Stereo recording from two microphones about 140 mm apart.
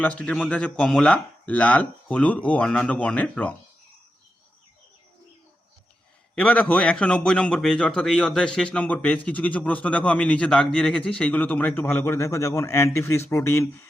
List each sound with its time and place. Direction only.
0.0 s a man's voice: 10° left (ahead or behind)
6.3 s a man's voice: 10° left (ahead or behind)